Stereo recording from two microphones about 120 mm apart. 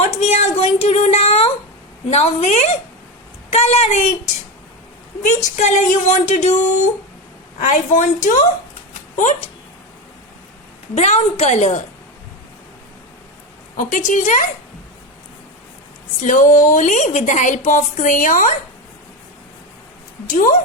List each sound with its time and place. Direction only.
0.0 s a sound: 65° left (ahead or behind)
2.0 s a woman's voice: 65° left (ahead or behind)
5.2 s a woman's voice: 80° left
7.6 s a woman's voice: 90° left
10.9 s a woman's voice: 70° left (ahead or behind)
13.7 s a woman's voice: 90° left
16.2 s a woman's voice: 90° left
20.2 s a woman's voice: 90° left